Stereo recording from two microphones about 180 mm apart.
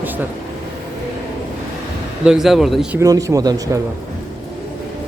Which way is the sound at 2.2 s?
5° right (ahead or behind).